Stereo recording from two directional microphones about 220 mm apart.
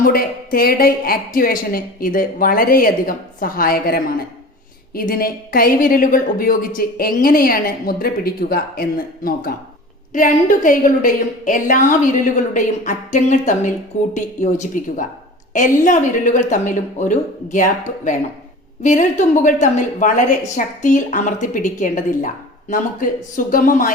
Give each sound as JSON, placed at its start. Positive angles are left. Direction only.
{"t": 0.0, "sound": "a woman's voice", "side_deg": 40}